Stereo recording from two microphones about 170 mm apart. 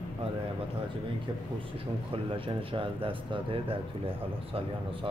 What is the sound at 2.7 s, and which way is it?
Speech, 30° right (ahead or behind).